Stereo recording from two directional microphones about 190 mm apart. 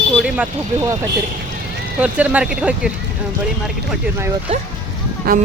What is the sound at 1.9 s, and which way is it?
Speech, 5° right (ahead or behind).